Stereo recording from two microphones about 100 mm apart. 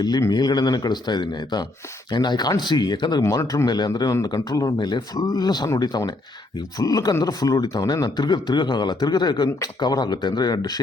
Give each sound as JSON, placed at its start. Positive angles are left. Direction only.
{"t": 0.2, "sound": "speech", "side_deg": 40}